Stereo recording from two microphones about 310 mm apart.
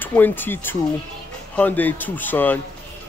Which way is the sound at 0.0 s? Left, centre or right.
Centre.